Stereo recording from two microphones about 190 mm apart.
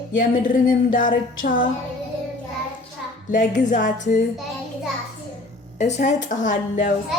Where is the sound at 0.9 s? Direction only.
45° left (ahead or behind).